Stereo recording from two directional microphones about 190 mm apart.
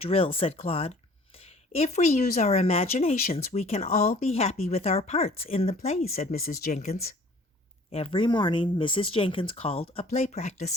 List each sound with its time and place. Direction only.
0.0 s speech: 30° left (ahead or behind)
6.4 s speech: 50° left (ahead or behind)